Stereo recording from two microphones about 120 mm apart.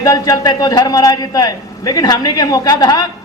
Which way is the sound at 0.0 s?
30° left (ahead or behind).